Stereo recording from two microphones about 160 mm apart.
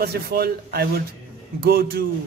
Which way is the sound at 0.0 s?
75° right (ahead or behind).